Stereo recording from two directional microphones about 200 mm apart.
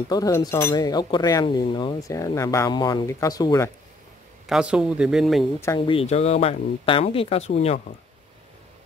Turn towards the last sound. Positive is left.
turn(degrees=30)  # may be behind; listen again after turning